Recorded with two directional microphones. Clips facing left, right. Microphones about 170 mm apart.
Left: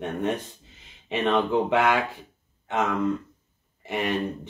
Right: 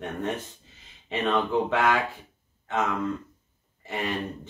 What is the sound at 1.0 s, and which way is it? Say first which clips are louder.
Speech: left 2 dB; 20° left (ahead or behind).